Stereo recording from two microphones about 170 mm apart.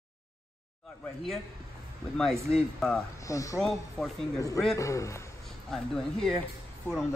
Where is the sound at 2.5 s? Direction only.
5° left (ahead or behind).